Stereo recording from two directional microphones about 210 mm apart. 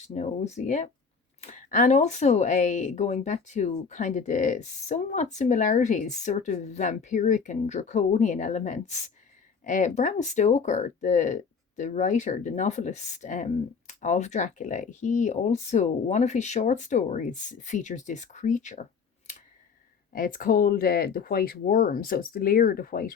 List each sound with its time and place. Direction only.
0.1 s speech: 35° left (ahead or behind)
20.1 s speech: 40° left (ahead or behind)